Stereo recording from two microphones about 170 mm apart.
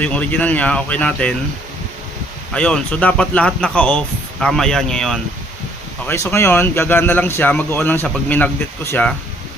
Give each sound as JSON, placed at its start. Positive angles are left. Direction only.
{"t": 0.0, "sound": "a man's voice", "side_deg": 10}
{"t": 2.5, "sound": "speech", "side_deg": 5}
{"t": 6.0, "sound": "a man's voice", "side_deg": 15}